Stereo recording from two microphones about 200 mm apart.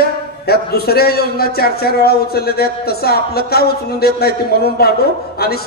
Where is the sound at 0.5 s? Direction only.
50° left (ahead or behind).